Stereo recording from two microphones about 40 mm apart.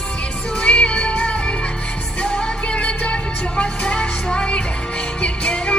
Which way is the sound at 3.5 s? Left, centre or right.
Left.